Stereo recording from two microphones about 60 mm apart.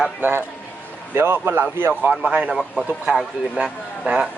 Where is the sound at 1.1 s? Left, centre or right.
Right.